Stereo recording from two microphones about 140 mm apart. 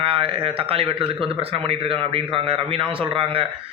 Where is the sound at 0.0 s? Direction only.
40° right (ahead or behind).